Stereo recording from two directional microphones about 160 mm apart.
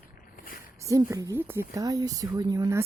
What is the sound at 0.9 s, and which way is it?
A woman's voice, 20° right (ahead or behind).